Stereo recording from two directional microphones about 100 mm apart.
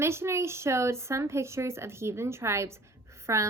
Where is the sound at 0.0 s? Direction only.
25° right (ahead or behind).